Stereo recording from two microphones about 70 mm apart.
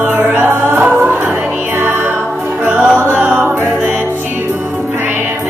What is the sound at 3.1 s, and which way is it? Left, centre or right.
Choir, centre.